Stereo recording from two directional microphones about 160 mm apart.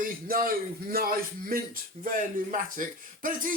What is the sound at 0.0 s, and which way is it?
Speech, 65° right (ahead or behind).